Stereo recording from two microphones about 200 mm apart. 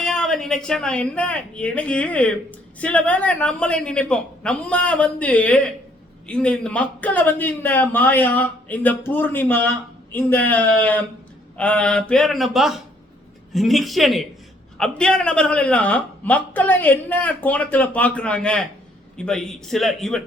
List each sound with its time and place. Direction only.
0.0 s a man's voice: 5° left (ahead or behind)